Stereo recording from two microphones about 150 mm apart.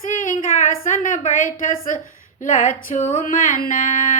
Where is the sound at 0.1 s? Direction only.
60° left (ahead or behind).